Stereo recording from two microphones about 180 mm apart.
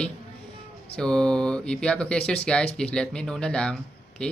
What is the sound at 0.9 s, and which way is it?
Speech, 5° left (ahead or behind).